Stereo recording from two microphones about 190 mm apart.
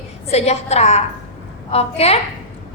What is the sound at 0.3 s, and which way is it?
A woman's voice, 35° left (ahead or behind).